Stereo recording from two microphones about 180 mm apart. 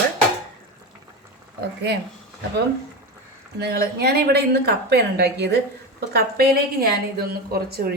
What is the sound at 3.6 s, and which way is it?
A woman's voice, 60° right (ahead or behind).